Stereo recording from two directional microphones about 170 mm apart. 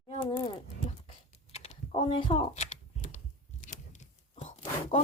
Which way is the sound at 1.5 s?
40° left (ahead or behind).